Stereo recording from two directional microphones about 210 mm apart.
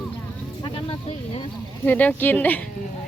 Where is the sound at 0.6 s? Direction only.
25° left (ahead or behind).